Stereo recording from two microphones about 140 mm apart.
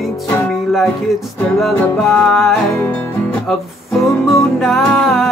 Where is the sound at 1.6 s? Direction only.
Centre (ahead or behind).